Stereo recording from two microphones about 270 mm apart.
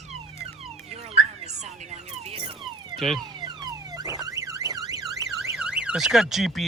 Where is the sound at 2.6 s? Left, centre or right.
Centre.